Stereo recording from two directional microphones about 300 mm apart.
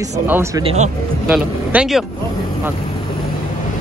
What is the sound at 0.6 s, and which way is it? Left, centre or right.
Speech, right.